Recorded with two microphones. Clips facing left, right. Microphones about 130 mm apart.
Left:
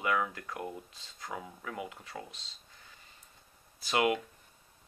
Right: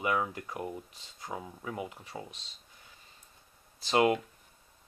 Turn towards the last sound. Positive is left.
turn(degrees=-30)  # may be behind; listen again after turning